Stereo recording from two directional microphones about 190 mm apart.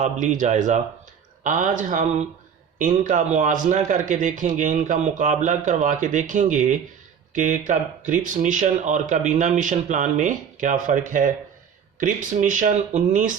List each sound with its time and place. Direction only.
0.0 s a man's voice: 40° right (ahead or behind)